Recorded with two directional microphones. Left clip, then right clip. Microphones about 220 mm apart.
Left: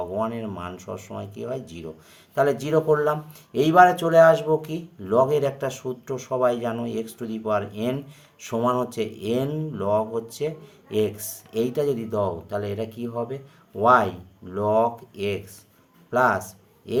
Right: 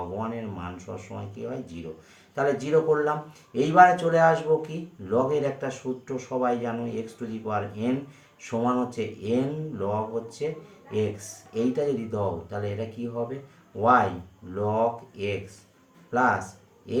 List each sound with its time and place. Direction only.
0.2 s speech: 55° left (ahead or behind)
11.5 s speech: 50° left (ahead or behind)